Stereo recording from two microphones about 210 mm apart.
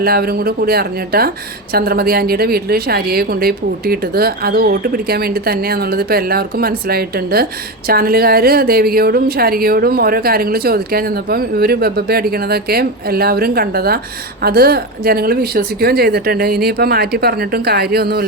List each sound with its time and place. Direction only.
0.0 s speech: 45° right (ahead or behind)